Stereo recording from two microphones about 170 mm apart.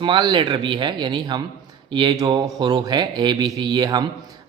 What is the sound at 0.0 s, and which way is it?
A man's voice, 25° right (ahead or behind).